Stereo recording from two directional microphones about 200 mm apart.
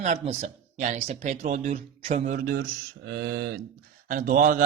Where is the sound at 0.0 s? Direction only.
30° right (ahead or behind).